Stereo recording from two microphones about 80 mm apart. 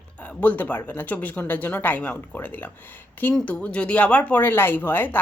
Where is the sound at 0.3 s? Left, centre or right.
Left.